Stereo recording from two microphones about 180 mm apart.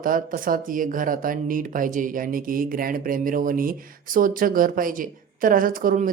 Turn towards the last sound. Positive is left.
turn(degrees=-50)  # may be behind; listen again after turning